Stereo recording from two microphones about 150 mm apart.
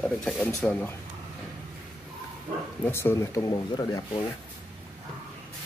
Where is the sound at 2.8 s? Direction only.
15° left (ahead or behind).